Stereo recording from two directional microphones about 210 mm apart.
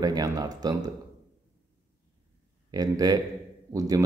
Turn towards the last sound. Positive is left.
turn(degrees=-15)  # may be behind; listen again after turning